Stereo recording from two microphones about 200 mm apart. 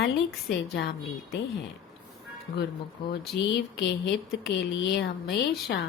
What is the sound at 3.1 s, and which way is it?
Speech, 60° left (ahead or behind).